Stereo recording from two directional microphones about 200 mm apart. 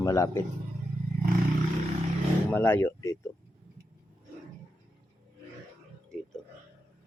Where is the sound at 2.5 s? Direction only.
10° left (ahead or behind).